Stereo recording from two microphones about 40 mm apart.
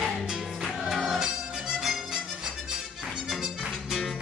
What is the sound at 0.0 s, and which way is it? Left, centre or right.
Music, centre.